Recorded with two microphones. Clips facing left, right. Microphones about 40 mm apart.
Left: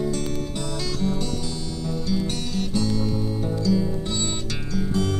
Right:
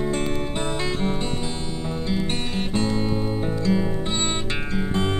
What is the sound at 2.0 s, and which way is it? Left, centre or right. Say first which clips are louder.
Music: right 1 dB; right.